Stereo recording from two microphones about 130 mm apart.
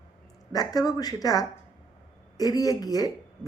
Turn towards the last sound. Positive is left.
turn(degrees=30)  # may be behind; listen again after turning